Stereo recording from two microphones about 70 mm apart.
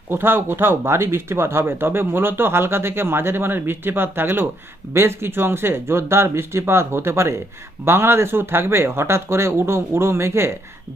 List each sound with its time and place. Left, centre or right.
0.1 s speech: right